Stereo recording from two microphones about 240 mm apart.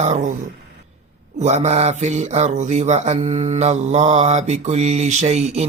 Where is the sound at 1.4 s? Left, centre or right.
Right.